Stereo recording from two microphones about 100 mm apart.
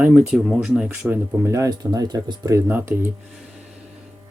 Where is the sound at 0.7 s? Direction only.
20° right (ahead or behind); by 2.6 s 40° right (ahead or behind).